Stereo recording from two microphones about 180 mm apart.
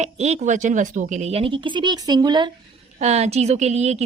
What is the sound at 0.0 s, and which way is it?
Speech, 40° right (ahead or behind).